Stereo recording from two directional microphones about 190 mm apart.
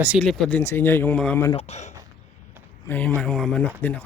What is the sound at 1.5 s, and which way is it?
Speech, 35° left (ahead or behind).